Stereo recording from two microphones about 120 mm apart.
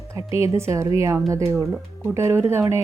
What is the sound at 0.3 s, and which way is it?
Speech, 20° right (ahead or behind).